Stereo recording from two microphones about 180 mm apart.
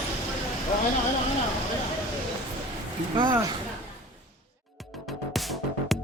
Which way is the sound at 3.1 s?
25° right (ahead or behind).